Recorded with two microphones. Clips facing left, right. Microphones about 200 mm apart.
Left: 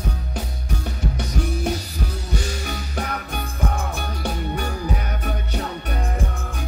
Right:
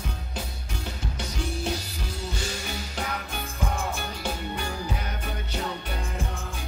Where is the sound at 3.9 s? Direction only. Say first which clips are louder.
Left 4 dB; 60° left (ahead or behind).